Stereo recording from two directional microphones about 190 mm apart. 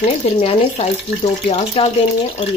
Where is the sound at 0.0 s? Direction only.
35° left (ahead or behind).